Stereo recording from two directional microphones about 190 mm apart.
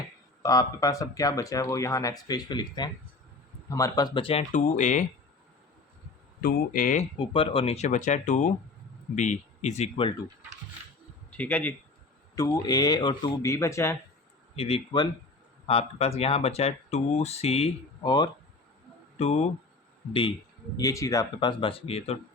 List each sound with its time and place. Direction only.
0.4 s speech: 20° left (ahead or behind); by 5.0 s 40° left (ahead or behind)
6.4 s speech: 45° left (ahead or behind)
7.2 s speech: 30° left (ahead or behind)
11.3 s speech: 10° left (ahead or behind)
12.4 s speech: 20° left (ahead or behind)
14.5 s speech: 30° left (ahead or behind)
19.2 s speech: 35° left (ahead or behind)
20.7 s speech: 15° left (ahead or behind); by 22.2 s 35° left (ahead or behind)